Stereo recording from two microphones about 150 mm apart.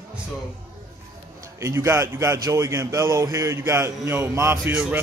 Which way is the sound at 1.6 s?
20° right (ahead or behind).